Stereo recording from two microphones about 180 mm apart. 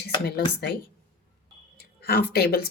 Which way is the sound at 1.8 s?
60° left (ahead or behind).